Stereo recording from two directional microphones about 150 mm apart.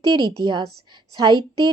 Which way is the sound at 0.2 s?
30° right (ahead or behind).